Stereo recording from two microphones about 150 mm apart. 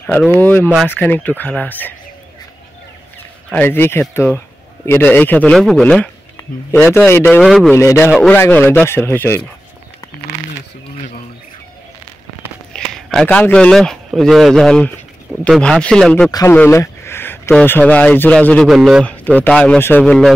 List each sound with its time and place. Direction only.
0.4 s a man's voice: 10° left (ahead or behind)
3.4 s a man's voice: 15° left (ahead or behind)
7.7 s a man's voice: 20° left (ahead or behind)
12.7 s a man's voice: 5° left (ahead or behind)
16.3 s speech: 25° left (ahead or behind)
16.5 s a sound: 15° left (ahead or behind)
17.6 s a man's voice: 10° left (ahead or behind)